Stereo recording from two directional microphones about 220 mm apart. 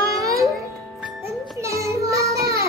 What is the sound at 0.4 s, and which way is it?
Music, centre (ahead or behind).